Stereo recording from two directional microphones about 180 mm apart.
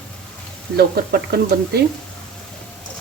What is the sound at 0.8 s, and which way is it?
Speech, 60° right (ahead or behind).